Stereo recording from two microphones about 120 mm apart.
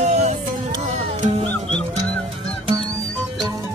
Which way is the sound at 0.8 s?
60° right (ahead or behind).